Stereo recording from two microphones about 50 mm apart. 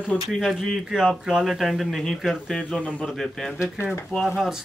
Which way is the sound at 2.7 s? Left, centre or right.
Left.